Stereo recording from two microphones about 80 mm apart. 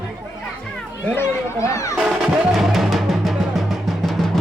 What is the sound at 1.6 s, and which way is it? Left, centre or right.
Speech, left.